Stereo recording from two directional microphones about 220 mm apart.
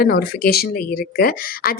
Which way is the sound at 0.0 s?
45° left (ahead or behind).